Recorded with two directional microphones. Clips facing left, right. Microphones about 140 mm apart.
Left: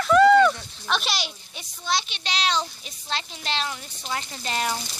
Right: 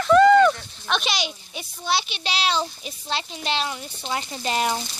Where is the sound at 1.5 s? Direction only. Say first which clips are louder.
Right 2 dB; 10° right (ahead or behind).